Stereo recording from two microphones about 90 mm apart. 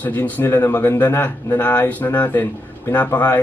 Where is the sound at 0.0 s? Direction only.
20° left (ahead or behind).